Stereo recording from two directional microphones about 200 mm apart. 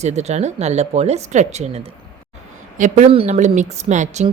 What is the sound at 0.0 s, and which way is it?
Speech, 35° right (ahead or behind).